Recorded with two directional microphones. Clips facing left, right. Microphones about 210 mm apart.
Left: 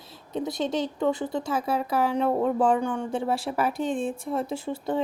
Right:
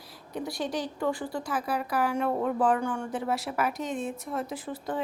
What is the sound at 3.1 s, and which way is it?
A woman's voice, 30° left (ahead or behind).